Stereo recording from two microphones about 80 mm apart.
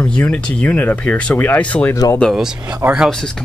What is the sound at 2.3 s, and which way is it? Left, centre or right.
Speech, centre.